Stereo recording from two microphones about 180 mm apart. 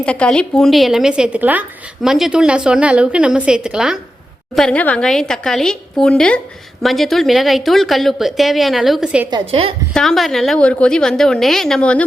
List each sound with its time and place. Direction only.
0.0 s a woman's voice: 5° left (ahead or behind)
9.3 s a woman's voice: 30° right (ahead or behind)
9.9 s a woman's voice: centre (ahead or behind)